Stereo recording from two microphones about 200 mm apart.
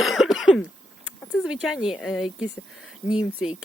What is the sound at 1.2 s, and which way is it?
Speech, 5° left (ahead or behind).